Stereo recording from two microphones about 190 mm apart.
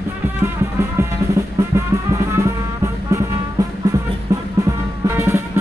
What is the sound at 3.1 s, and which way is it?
Music, 15° right (ahead or behind).